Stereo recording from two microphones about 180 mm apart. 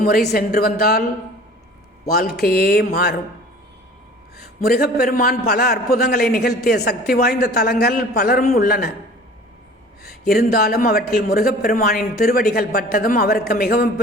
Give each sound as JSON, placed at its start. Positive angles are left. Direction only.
{"t": 0.0, "sound": "a man's voice", "side_deg": 55}
{"t": 2.0, "sound": "a man's voice", "side_deg": 60}
{"t": 4.4, "sound": "a man's voice", "side_deg": 60}
{"t": 10.0, "sound": "a man's voice", "side_deg": 60}